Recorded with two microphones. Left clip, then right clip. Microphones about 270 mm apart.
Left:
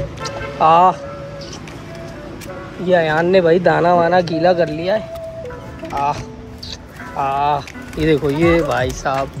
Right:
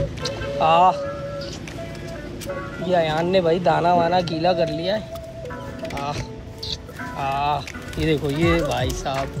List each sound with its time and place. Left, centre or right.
0.6 s speech: centre
2.9 s speech: centre
7.2 s speech: centre